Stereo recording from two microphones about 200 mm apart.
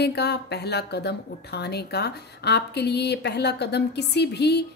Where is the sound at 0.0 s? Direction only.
55° left (ahead or behind).